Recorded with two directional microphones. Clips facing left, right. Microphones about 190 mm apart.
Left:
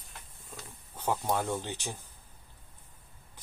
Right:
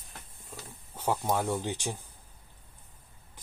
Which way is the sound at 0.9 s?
10° right (ahead or behind).